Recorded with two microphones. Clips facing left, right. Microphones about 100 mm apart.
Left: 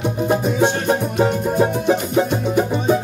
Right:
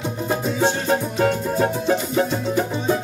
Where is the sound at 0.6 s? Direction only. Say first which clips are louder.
Left 3 dB; 15° left (ahead or behind).